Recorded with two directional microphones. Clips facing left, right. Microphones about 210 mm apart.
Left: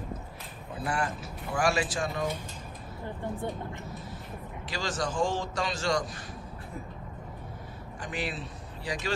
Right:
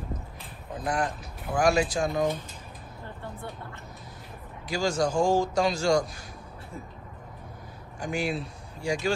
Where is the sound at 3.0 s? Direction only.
15° left (ahead or behind).